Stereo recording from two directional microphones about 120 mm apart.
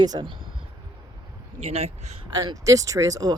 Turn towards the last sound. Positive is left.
turn(degrees=-30)  # may be behind; listen again after turning